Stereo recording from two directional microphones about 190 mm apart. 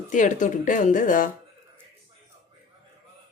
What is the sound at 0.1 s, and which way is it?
Speech, 40° left (ahead or behind).